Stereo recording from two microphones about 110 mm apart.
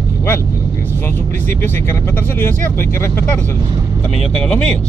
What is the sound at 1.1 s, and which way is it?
Speech, 20° left (ahead or behind).